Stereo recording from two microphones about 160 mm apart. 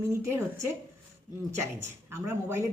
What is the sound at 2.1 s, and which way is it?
Speech, 15° right (ahead or behind).